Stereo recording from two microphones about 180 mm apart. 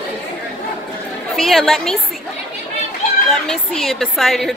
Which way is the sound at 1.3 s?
Centre (ahead or behind).